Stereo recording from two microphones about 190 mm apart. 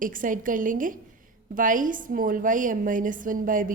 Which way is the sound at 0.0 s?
45° right (ahead or behind).